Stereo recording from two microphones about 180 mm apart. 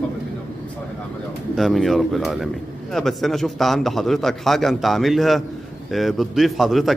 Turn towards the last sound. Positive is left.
turn(degrees=0)  # may be behind; listen again after turning